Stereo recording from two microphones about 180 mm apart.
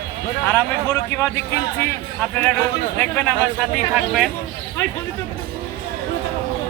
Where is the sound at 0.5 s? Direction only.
15° left (ahead or behind).